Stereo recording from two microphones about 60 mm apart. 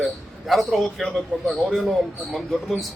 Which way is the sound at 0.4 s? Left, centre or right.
Centre.